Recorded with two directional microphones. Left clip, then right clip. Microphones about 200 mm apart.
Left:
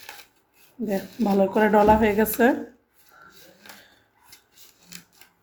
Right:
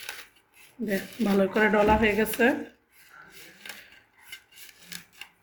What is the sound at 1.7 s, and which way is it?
Speech, 20° left (ahead or behind).